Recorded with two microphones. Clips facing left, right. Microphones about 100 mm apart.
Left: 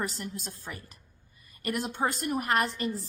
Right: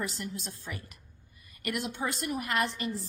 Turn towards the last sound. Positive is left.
turn(degrees=40)  # may be behind; listen again after turning